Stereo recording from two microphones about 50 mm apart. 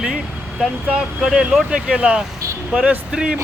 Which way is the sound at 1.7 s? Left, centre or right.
Right.